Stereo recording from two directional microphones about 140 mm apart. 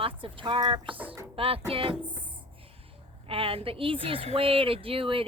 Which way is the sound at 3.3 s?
40° right (ahead or behind).